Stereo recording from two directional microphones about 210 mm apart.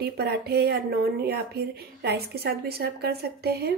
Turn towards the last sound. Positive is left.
turn(degrees=-50)  # may be behind; listen again after turning